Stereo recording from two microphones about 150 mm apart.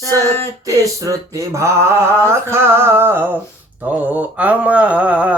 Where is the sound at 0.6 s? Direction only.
20° right (ahead or behind).